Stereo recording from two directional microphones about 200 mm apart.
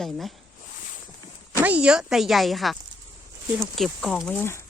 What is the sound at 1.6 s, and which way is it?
Speech, 5° right (ahead or behind).